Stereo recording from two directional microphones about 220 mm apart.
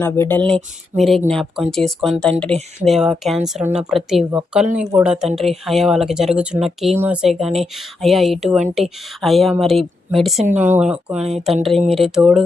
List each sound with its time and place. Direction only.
0.0 s speech: 10° left (ahead or behind)